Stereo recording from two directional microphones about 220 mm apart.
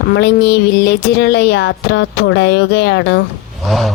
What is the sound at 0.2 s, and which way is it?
Speech, 50° left (ahead or behind).